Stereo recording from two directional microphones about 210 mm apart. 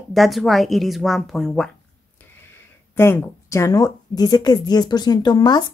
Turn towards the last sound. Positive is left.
turn(degrees=20)  # may be behind; listen again after turning